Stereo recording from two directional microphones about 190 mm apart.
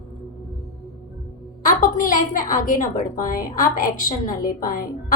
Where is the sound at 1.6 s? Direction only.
45° left (ahead or behind).